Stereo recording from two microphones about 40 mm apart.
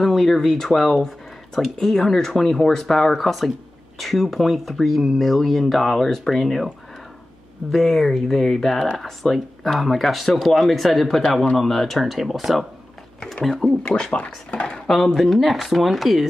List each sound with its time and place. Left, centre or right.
0.0 s speech: centre
7.7 s speech: centre
13.2 s speech: centre
13.7 s speech: centre
14.1 s speech: left
15.0 s speech: centre